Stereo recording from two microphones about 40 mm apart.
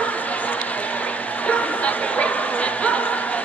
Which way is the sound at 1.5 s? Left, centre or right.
Left.